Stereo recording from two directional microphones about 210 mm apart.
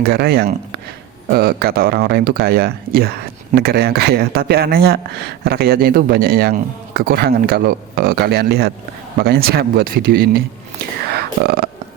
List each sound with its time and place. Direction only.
0.1 s speech: 50° right (ahead or behind)